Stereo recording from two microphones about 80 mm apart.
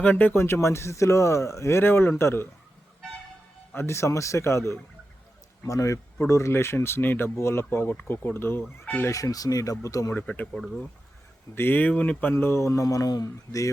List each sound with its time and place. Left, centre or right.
0.0 s speech: centre
3.8 s speech: left
9.0 s speech: left
10.2 s speech: centre
11.5 s speech: left
12.3 s speech: left